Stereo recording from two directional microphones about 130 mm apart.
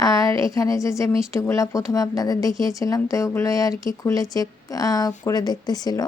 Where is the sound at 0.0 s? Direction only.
25° left (ahead or behind).